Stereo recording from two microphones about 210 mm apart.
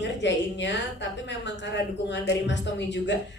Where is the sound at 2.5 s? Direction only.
60° left (ahead or behind).